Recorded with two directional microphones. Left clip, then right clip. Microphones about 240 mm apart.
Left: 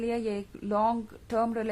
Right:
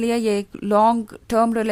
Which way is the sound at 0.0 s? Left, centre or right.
Right.